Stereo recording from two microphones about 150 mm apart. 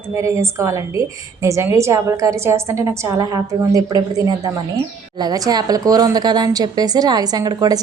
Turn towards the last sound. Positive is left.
turn(degrees=-25)  # may be behind; listen again after turning